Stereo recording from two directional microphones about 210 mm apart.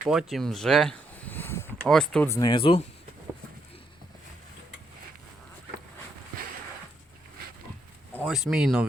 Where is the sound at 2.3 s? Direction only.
20° left (ahead or behind).